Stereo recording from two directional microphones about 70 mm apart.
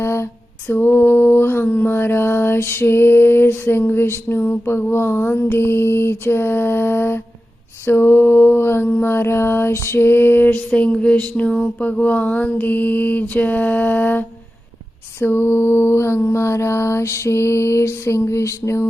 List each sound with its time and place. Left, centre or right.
0.0 s lullaby: left
0.7 s mantra: left
10.7 s a sound: centre
11.8 s mantra: left